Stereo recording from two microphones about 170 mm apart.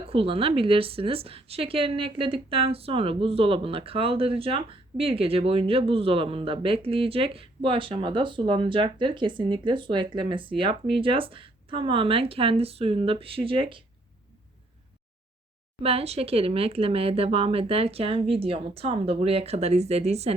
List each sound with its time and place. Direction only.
0.1 s a woman's voice: 35° right (ahead or behind)
15.8 s a woman's voice: 35° right (ahead or behind)